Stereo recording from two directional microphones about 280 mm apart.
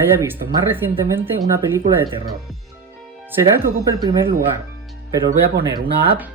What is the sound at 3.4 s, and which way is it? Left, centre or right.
Speech, centre.